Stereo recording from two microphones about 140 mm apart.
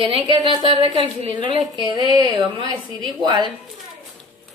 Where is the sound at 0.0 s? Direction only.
40° right (ahead or behind).